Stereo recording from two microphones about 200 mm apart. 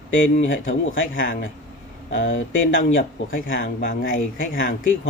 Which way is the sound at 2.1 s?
70° left (ahead or behind).